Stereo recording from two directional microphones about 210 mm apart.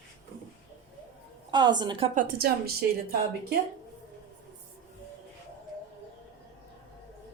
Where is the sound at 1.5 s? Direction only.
20° right (ahead or behind).